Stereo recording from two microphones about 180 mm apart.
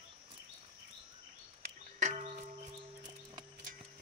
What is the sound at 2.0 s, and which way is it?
Music, 40° right (ahead or behind).